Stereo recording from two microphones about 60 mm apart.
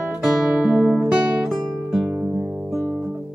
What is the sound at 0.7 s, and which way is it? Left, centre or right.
Music, right.